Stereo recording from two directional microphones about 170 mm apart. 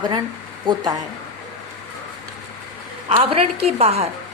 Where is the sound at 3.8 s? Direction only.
40° right (ahead or behind).